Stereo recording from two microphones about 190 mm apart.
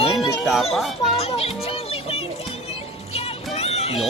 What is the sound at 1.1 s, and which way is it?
Speech, 35° left (ahead or behind).